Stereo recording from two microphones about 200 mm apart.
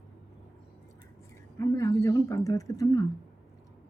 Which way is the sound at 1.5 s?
15° left (ahead or behind).